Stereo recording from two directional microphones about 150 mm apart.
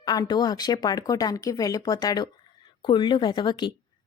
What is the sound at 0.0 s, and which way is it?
A woman's voice, 25° left (ahead or behind).